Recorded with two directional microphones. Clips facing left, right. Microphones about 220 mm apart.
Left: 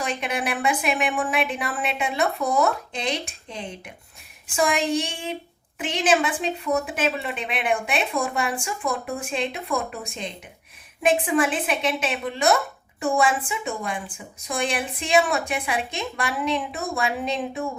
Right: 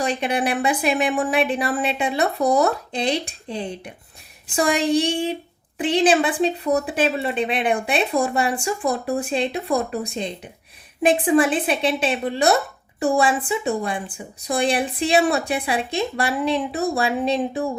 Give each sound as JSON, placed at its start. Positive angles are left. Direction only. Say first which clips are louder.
{"t": 0.0, "sound": "speech", "louder": "right 5 dB", "side_deg": -35}